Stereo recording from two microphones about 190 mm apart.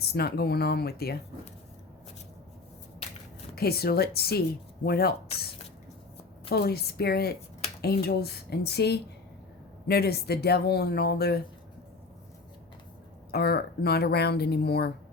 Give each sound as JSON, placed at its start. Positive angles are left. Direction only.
{"t": 0.1, "sound": "speech", "side_deg": 55}
{"t": 3.5, "sound": "speech", "side_deg": 55}
{"t": 6.5, "sound": "speech", "side_deg": 55}
{"t": 13.3, "sound": "speech", "side_deg": 55}